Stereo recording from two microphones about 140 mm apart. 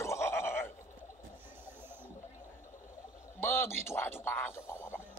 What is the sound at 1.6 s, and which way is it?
Printer, 15° right (ahead or behind).